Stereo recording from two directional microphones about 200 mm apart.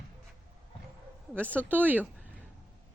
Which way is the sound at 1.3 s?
5° left (ahead or behind).